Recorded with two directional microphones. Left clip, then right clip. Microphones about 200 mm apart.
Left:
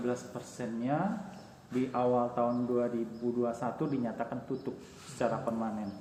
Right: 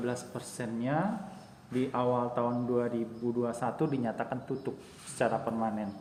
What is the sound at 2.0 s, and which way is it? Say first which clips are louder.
A man's voice: left 1 dB; 55° right (ahead or behind).